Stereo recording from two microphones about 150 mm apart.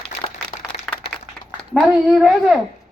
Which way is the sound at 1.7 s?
5° right (ahead or behind).